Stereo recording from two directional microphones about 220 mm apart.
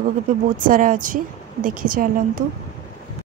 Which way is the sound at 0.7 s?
40° right (ahead or behind).